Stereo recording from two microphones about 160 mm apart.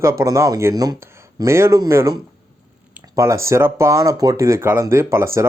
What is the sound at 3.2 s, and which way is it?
Speech, 20° right (ahead or behind).